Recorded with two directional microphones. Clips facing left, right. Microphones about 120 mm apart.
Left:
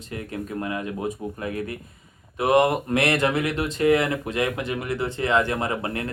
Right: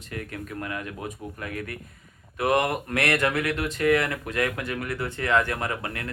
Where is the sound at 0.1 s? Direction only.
25° left (ahead or behind).